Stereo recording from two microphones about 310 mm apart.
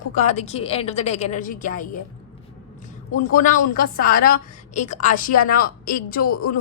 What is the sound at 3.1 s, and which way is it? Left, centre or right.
A woman's voice, left.